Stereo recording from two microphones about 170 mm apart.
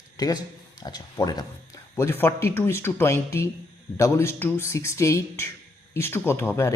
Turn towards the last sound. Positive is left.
turn(degrees=15)  # may be behind; listen again after turning